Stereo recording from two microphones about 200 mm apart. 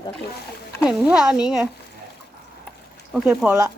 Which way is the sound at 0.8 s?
5° right (ahead or behind).